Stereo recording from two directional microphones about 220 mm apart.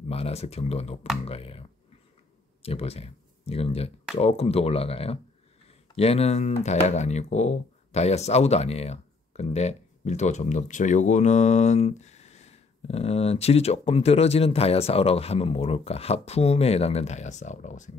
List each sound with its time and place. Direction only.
0.1 s speech: 30° left (ahead or behind)